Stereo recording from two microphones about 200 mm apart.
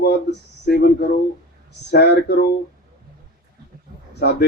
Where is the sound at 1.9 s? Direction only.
55° left (ahead or behind).